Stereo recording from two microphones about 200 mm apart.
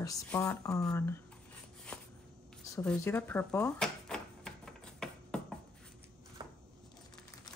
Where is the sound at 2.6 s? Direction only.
15° left (ahead or behind).